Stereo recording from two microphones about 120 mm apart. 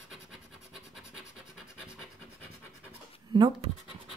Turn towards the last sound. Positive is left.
turn(degrees=-40)  # may be behind; listen again after turning